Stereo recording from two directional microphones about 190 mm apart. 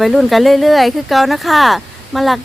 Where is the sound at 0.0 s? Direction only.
Centre (ahead or behind).